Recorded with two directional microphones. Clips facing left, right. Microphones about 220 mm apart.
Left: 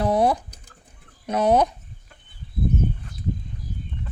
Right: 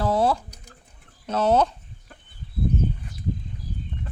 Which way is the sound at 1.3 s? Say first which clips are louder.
Left 1 dB; 15° left (ahead or behind).